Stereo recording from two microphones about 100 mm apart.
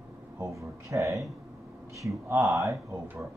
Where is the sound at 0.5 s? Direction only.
30° right (ahead or behind).